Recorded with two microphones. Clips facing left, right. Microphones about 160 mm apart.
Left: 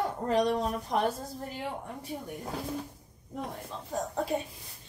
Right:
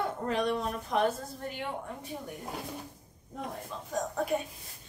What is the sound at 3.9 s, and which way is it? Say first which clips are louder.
Speech: even; 30° left (ahead or behind).